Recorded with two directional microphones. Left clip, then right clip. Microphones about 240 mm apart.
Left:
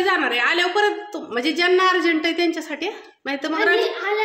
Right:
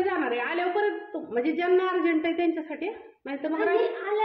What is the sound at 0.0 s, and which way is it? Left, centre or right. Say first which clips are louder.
A woman's voice: left 8 dB; centre.